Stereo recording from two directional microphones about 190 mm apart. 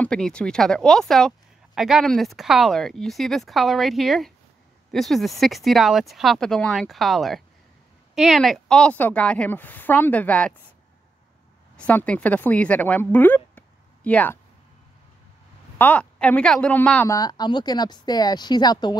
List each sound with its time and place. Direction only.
0.0 s speech: 5° left (ahead or behind)
11.7 s a woman's voice: 5° left (ahead or behind)
15.8 s a woman's voice: 5° left (ahead or behind)
17.1 s a woman's voice: 20° left (ahead or behind)